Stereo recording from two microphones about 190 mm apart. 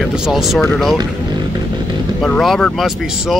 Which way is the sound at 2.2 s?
Centre (ahead or behind).